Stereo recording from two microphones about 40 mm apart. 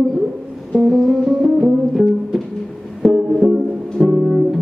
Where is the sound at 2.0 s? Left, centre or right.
Right.